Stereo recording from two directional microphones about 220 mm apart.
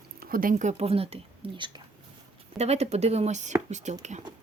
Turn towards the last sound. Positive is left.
turn(degrees=-30)  # may be behind; listen again after turning